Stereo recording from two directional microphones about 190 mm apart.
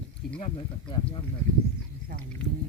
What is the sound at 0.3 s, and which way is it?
Speech, 25° left (ahead or behind).